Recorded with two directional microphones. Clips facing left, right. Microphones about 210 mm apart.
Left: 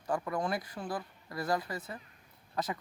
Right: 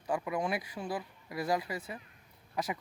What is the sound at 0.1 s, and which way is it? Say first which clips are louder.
Speech: even; 10° right (ahead or behind).